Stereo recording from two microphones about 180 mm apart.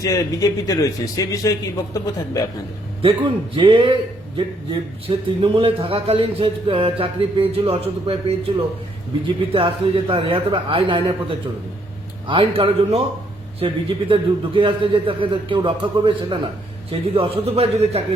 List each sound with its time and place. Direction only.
0.0 s a man's voice: 20° left (ahead or behind)
3.0 s speech: 30° right (ahead or behind)
9.2 s speech: 25° right (ahead or behind)
12.3 s a man's voice: 30° right (ahead or behind)